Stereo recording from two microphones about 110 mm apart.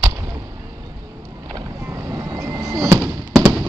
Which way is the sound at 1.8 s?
25° right (ahead or behind).